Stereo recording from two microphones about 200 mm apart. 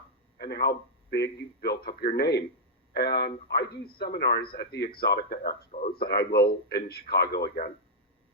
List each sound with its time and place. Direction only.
0.3 s a man's voice: 55° left (ahead or behind)